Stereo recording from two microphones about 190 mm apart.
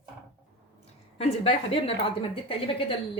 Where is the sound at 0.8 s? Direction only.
30° left (ahead or behind).